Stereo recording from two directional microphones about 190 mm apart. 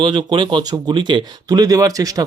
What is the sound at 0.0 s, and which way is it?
Speech, 25° right (ahead or behind).